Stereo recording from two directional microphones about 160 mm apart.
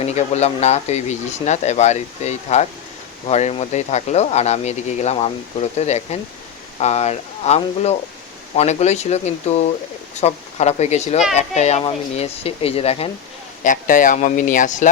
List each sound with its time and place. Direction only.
0.0 s speech: 45° left (ahead or behind)
13.7 s speech: 55° left (ahead or behind)